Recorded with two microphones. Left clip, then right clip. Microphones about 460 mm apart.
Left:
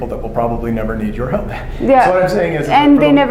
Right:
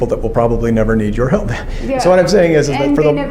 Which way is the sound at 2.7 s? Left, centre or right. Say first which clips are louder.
Left 3 dB; left.